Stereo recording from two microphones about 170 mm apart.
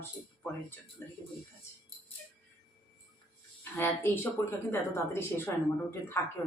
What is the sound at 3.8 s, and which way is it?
A woman's voice, 15° left (ahead or behind).